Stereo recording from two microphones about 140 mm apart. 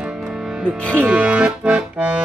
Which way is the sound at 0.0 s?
5° right (ahead or behind).